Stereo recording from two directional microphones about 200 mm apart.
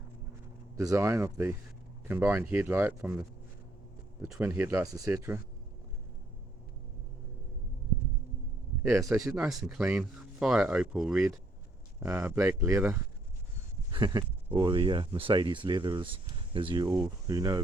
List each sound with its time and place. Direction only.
0.8 s speech: 15° right (ahead or behind)
4.3 s speech: 10° right (ahead or behind)
8.9 s speech: 15° right (ahead or behind)
9.3 s speech: 5° right (ahead or behind)